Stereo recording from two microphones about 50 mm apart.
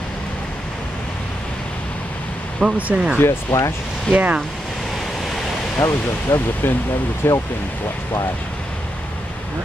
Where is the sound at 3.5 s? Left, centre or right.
Left.